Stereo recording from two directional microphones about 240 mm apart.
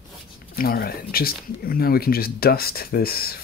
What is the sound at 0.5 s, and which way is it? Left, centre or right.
Speech, left.